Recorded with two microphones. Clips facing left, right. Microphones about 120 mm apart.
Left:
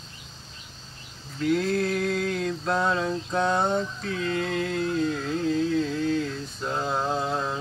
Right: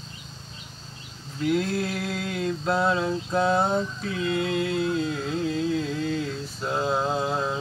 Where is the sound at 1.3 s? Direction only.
5° right (ahead or behind).